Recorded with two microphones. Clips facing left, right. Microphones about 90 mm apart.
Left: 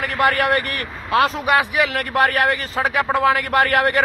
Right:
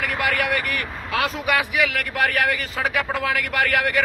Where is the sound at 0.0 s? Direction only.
35° left (ahead or behind).